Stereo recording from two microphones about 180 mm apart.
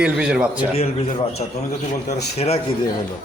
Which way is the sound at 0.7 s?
35° left (ahead or behind).